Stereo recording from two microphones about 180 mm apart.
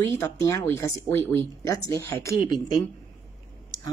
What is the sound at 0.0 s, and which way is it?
Speech, 15° left (ahead or behind).